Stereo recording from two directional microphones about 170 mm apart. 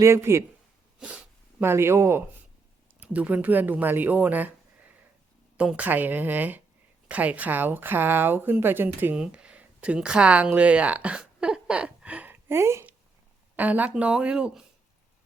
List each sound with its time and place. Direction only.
0.0 s speech: 15° right (ahead or behind)
0.9 s speech: 5° right (ahead or behind)
5.5 s a woman's voice: 5° right (ahead or behind)